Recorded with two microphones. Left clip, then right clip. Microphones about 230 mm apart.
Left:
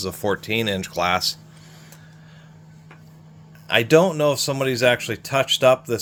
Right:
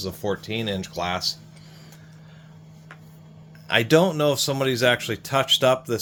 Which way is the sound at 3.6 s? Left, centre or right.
Centre.